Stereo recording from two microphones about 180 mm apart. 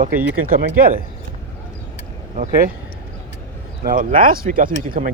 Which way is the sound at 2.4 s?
50° right (ahead or behind).